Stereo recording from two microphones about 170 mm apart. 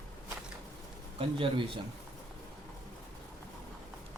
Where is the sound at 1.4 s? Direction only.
30° right (ahead or behind).